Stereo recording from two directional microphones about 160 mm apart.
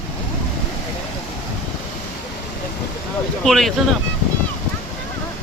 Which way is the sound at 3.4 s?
5° left (ahead or behind).